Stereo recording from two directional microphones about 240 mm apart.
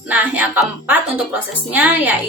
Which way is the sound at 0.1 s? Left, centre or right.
Centre.